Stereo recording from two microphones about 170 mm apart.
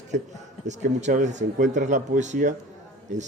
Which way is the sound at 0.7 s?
45° right (ahead or behind).